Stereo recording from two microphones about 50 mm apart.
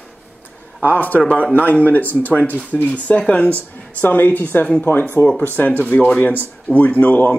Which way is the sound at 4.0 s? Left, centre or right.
Left.